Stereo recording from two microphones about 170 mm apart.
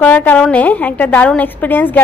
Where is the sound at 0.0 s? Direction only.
10° left (ahead or behind).